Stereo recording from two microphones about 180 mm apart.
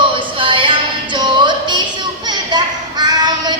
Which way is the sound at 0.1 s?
30° right (ahead or behind).